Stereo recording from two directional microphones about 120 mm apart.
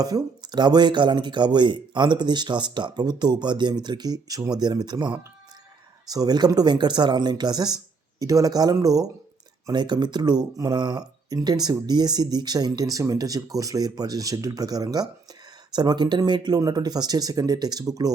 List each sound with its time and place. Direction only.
0.0 s speech: 35° right (ahead or behind)